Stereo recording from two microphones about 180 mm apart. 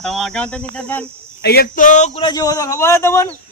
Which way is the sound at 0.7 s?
10° left (ahead or behind).